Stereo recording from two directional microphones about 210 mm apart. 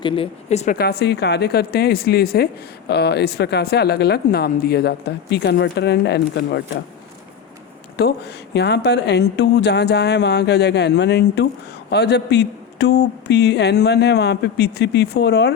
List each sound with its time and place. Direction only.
0.0 s a woman's voice: 25° left (ahead or behind)
0.8 s speech: 50° left (ahead or behind)
7.9 s speech: 50° left (ahead or behind)